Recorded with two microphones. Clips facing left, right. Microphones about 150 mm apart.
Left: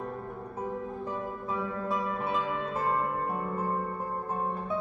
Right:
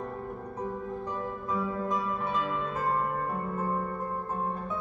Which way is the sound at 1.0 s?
5° left (ahead or behind).